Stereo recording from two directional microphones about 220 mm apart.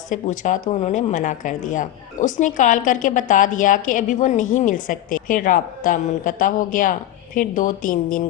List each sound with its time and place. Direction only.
0.1 s a woman's voice: 35° left (ahead or behind)